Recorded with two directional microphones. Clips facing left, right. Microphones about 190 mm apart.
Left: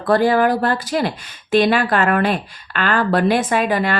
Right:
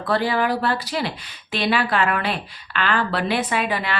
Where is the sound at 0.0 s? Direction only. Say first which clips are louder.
Left 6 dB; 45° left (ahead or behind).